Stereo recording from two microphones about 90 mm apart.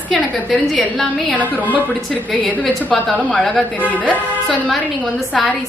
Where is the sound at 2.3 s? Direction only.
10° left (ahead or behind).